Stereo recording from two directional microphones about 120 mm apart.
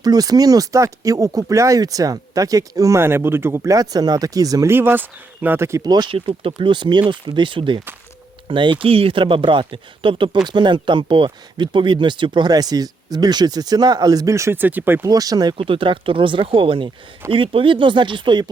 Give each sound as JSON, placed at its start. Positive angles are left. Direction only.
{"t": 0.0, "sound": "speech", "side_deg": -35}
{"t": 4.7, "sound": "speech", "side_deg": -20}
{"t": 5.8, "sound": "speech", "side_deg": -35}
{"t": 6.1, "sound": "speech", "side_deg": -45}
{"t": 15.0, "sound": "speech", "side_deg": -30}
{"t": 15.5, "sound": "speech", "side_deg": -50}